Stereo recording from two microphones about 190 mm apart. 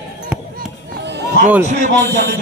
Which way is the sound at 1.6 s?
45° right (ahead or behind).